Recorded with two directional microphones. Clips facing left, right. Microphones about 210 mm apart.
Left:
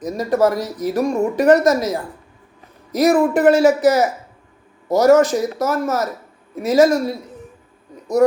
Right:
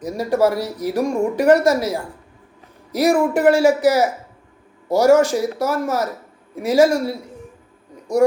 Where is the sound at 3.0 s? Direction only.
10° right (ahead or behind).